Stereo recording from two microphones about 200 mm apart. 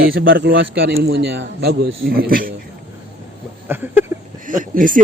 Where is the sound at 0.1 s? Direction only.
65° right (ahead or behind); by 2.5 s 45° right (ahead or behind).